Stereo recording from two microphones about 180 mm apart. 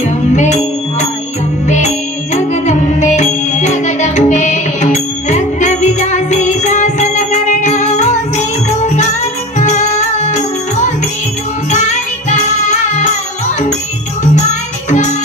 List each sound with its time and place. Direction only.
0.0 s music: 40° left (ahead or behind)
2.3 s music: 40° left (ahead or behind)
14.2 s music: 40° left (ahead or behind)